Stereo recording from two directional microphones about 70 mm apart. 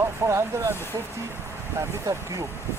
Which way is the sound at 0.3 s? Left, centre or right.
Right.